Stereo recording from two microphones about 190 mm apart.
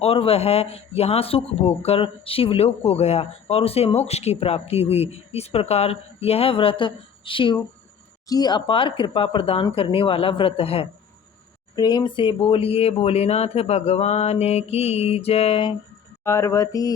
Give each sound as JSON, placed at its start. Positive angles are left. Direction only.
{"t": 0.0, "sound": "speech", "side_deg": 30}
{"t": 16.2, "sound": "mantra", "side_deg": 15}